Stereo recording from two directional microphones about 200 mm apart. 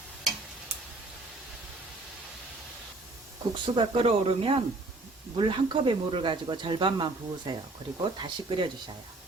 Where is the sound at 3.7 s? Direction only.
30° right (ahead or behind).